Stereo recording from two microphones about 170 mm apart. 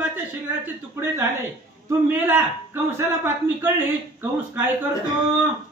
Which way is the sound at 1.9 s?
10° right (ahead or behind).